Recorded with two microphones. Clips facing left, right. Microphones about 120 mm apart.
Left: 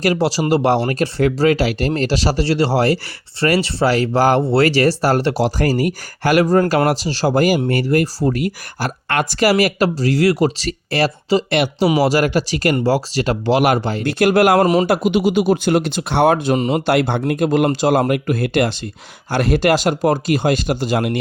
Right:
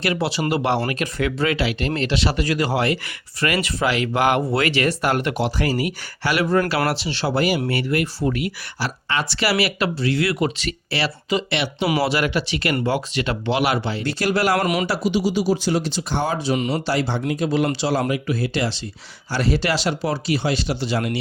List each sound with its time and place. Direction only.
0.0 s speech: 35° left (ahead or behind); by 14.6 s 55° left (ahead or behind)
14.6 s speech: 35° left (ahead or behind)
14.8 s speech: 55° left (ahead or behind)